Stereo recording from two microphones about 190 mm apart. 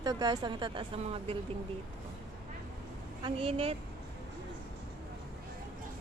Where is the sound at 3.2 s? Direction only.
30° right (ahead or behind).